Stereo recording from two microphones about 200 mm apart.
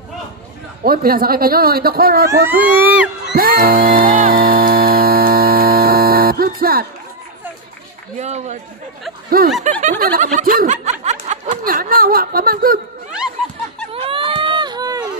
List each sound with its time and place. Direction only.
0.8 s speech: 50° right (ahead or behind)
3.3 s mains hum: 45° right (ahead or behind)
8.2 s speech: 35° right (ahead or behind)
9.6 s snicker: 35° right (ahead or behind)
13.9 s a sound: 25° right (ahead or behind)